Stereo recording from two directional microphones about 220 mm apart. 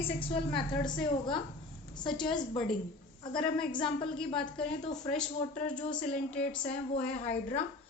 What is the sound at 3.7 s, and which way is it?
Speech, 20° left (ahead or behind).